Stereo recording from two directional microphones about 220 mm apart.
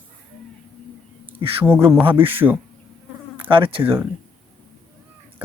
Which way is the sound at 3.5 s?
25° right (ahead or behind).